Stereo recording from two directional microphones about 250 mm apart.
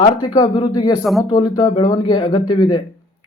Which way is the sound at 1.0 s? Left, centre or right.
Centre.